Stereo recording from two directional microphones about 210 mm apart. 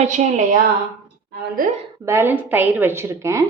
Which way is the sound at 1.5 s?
40° right (ahead or behind).